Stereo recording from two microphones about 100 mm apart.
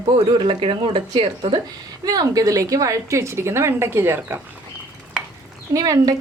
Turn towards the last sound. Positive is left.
turn(degrees=-35)  # may be behind; listen again after turning